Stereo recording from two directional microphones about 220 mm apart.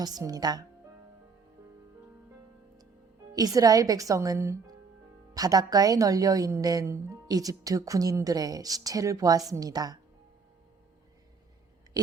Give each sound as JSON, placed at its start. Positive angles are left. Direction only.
{"t": 0.0, "sound": "a woman's voice", "side_deg": -15}
{"t": 3.3, "sound": "a woman's voice", "side_deg": -15}